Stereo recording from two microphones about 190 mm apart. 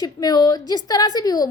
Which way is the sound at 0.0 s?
20° left (ahead or behind).